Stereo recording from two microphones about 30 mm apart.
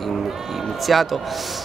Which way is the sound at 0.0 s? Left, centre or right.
Centre.